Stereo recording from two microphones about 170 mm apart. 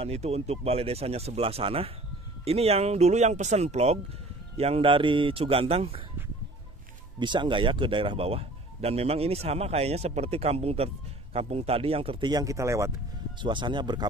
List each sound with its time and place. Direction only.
0.0 s speech: 40° right (ahead or behind)
7.2 s speech: 25° right (ahead or behind)
13.4 s speech: 30° right (ahead or behind)